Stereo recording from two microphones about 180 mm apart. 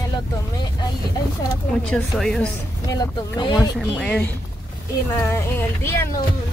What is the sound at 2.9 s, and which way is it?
Speech, 20° left (ahead or behind).